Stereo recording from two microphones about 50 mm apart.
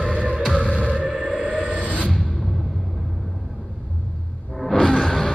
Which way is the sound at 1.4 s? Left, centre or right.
Right.